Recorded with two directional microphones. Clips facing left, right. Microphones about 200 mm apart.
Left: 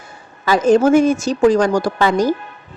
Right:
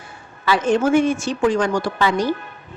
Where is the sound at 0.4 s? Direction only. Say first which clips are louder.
Left 5 dB; 40° left (ahead or behind).